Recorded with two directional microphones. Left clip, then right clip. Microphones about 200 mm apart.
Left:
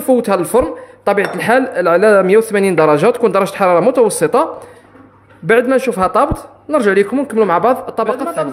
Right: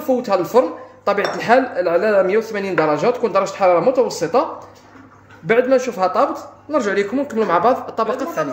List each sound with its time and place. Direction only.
0.0 s speech: 55° left (ahead or behind)
5.5 s speech: 50° left (ahead or behind); by 8.5 s 30° left (ahead or behind)